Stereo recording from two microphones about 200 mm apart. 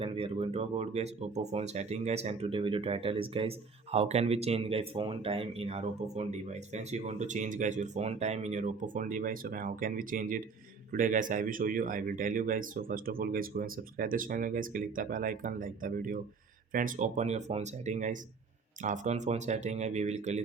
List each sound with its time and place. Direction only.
0.0 s speech: 25° right (ahead or behind)